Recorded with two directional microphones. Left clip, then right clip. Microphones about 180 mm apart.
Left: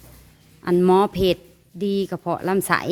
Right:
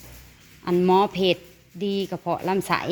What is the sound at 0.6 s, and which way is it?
Speech, 30° left (ahead or behind).